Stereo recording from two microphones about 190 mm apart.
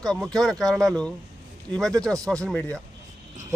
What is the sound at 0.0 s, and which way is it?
A man's voice, centre (ahead or behind).